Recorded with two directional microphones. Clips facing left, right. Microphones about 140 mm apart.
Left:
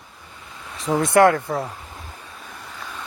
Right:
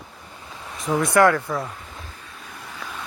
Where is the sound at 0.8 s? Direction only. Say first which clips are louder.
Left 2 dB; 25° left (ahead or behind).